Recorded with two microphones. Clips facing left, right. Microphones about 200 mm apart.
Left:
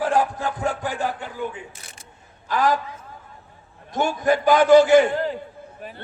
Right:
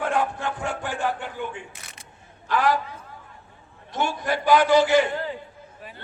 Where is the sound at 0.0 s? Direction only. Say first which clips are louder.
Left 3 dB; 35° left (ahead or behind).